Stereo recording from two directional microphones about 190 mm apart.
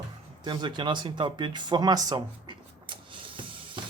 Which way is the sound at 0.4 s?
25° right (ahead or behind).